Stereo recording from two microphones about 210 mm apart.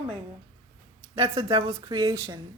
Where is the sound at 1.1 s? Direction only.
30° right (ahead or behind).